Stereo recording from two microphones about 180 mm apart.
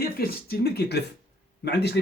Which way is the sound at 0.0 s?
55° left (ahead or behind).